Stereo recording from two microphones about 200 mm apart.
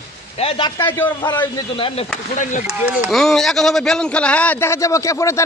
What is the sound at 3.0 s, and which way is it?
A man's voice, centre (ahead or behind).